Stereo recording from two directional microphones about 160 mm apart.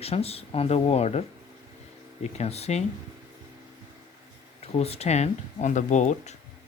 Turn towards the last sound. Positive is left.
turn(degrees=50)  # may be behind; listen again after turning